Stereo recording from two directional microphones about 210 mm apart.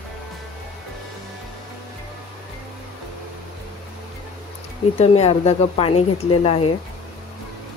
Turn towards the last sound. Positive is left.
turn(degrees=30)  # may be behind; listen again after turning